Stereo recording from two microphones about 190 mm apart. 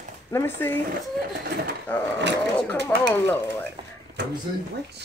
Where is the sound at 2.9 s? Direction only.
10° left (ahead or behind).